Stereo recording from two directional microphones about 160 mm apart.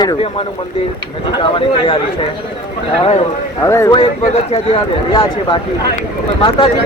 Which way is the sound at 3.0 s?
40° left (ahead or behind).